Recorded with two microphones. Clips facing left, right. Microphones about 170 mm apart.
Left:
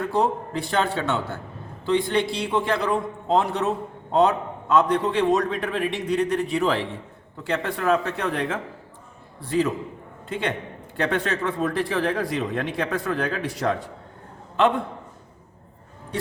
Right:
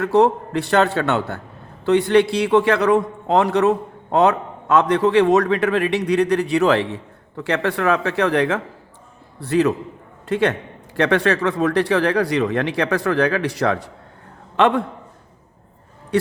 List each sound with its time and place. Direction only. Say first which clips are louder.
0.0 s a man's voice: right 7 dB; 75° right (ahead or behind)
9.4 s a man's voice: right 5 dB; 70° right (ahead or behind)